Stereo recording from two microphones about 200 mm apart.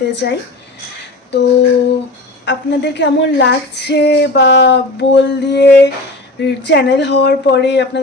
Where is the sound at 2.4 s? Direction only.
60° left (ahead or behind).